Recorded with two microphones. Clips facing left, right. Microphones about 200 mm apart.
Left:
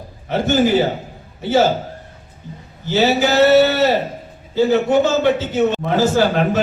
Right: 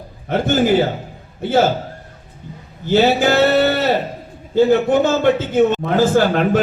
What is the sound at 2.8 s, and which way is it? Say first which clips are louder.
A man's voice: right 2 dB; 50° right (ahead or behind).